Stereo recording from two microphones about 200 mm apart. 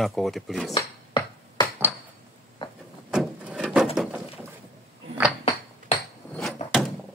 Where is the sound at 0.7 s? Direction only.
20° left (ahead or behind).